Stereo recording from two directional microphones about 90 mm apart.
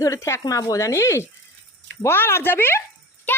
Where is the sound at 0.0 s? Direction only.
35° left (ahead or behind).